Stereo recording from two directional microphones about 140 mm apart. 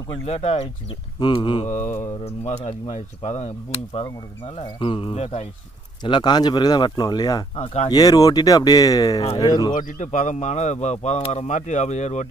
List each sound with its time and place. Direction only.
0.2 s speech: 45° left (ahead or behind)
1.2 s speech: 35° left (ahead or behind)
1.7 s speech: 60° left (ahead or behind)
4.7 s speech: 35° left (ahead or behind)
5.1 s speech: 50° left (ahead or behind)
6.0 s speech: 30° left (ahead or behind)
7.5 s speech: 45° left (ahead or behind)
7.9 s speech: 25° left (ahead or behind)
9.8 s speech: 70° left (ahead or behind)